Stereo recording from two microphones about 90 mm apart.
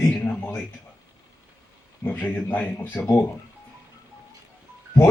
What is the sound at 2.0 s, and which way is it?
Speech, 20° left (ahead or behind).